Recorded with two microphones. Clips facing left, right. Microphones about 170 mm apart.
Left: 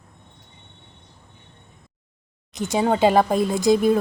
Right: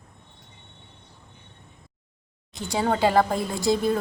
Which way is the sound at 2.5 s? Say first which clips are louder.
Left 4 dB; 20° left (ahead or behind).